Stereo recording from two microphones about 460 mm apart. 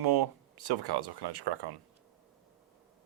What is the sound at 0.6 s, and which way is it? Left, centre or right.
Speech, right.